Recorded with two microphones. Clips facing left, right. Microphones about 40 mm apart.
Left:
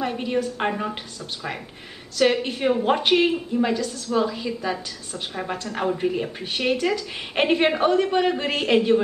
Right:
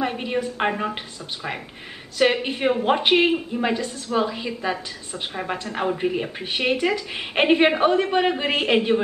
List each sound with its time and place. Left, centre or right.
0.0 s a woman's voice: centre
2.1 s a woman's voice: right